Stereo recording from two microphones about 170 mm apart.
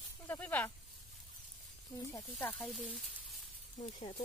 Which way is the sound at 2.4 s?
5° left (ahead or behind).